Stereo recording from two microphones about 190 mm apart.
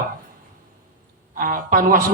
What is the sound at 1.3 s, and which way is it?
Speech, 45° right (ahead or behind).